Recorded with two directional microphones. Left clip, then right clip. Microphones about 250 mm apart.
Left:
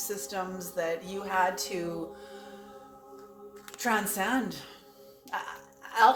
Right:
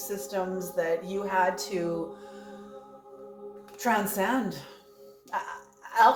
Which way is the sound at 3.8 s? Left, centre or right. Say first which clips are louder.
Right 2 dB; centre.